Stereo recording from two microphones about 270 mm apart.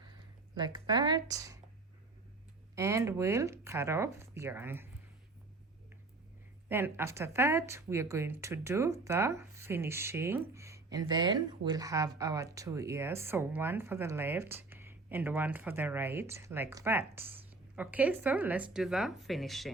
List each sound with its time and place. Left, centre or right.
0.5 s speech: centre
2.7 s speech: centre
6.7 s speech: centre